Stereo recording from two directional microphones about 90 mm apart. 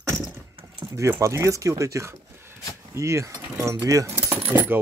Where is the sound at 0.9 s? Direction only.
35° right (ahead or behind).